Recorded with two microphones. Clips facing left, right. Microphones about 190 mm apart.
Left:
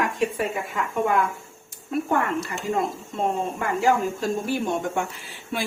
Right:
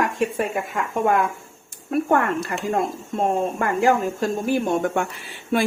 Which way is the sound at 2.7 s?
50° right (ahead or behind).